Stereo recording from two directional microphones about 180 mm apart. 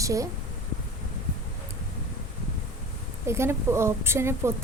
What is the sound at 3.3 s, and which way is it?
A woman's voice, 15° right (ahead or behind).